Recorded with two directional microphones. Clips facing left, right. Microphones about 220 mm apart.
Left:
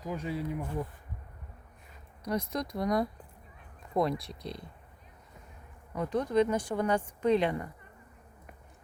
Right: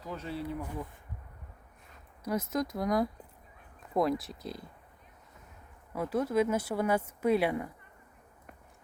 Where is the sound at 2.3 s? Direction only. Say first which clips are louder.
Right 1 dB; 5° right (ahead or behind).